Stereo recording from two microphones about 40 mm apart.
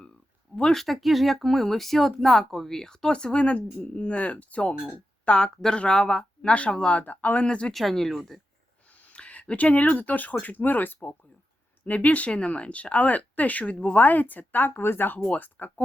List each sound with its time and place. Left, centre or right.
0.7 s speech: centre; by 3.2 s left
3.3 s speech: left
6.7 s speech: centre
6.9 s speech: left
7.3 s speech: left
7.7 s speech: centre
9.1 s speech: left
10.4 s speech: left
11.9 s speech: left
15.3 s speech: left